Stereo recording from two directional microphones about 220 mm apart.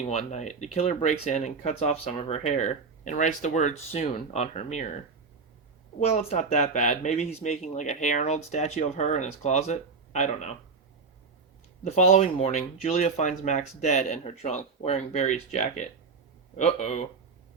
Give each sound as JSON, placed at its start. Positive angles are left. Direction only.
{"t": 0.1, "sound": "speech", "side_deg": 30}
{"t": 6.0, "sound": "speech", "side_deg": 30}
{"t": 11.8, "sound": "speech", "side_deg": 30}